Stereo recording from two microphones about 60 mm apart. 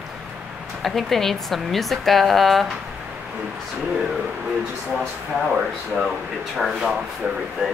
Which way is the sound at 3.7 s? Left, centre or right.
Centre.